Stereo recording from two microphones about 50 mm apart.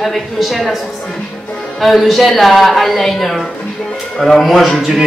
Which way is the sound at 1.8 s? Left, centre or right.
Centre.